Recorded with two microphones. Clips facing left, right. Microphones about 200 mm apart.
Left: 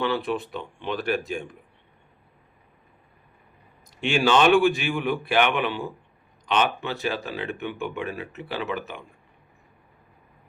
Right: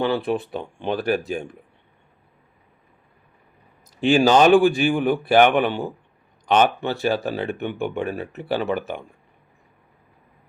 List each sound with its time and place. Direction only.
0.3 s a man's voice: 40° right (ahead or behind)
4.0 s a man's voice: 40° right (ahead or behind)
8.1 s a man's voice: 40° right (ahead or behind)
8.6 s speech: 55° right (ahead or behind)